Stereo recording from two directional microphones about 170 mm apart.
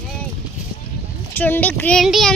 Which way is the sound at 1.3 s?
10° left (ahead or behind).